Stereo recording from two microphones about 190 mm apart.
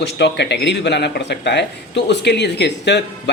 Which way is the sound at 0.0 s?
60° left (ahead or behind).